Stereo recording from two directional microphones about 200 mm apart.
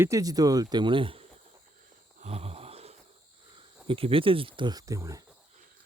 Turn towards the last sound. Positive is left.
turn(degrees=-15)  # may be behind; listen again after turning